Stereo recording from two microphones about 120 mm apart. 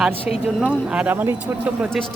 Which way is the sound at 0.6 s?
10° right (ahead or behind).